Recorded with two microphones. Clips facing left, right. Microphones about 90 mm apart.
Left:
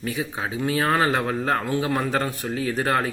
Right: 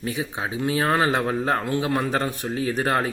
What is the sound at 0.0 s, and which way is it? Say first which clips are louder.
Speech: even; 20° right (ahead or behind).